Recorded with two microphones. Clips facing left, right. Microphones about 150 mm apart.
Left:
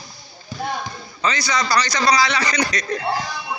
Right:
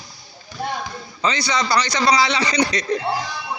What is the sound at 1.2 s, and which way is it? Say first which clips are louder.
A man's voice: right 1 dB; 25° right (ahead or behind).